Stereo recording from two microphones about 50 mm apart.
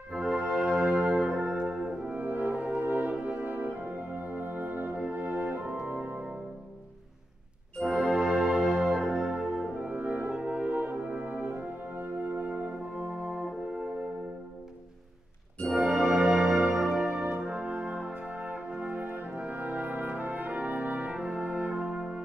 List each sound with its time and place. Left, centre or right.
0.1 s music: centre
0.8 s brass instrument: right
2.1 s french horn: right
2.8 s brass instrument: right
7.8 s organ: centre
8.3 s music: centre
9.1 s music: right
9.8 s french horn: right
10.3 s brass instrument: right
15.8 s music: right
17.0 s brass instrument: right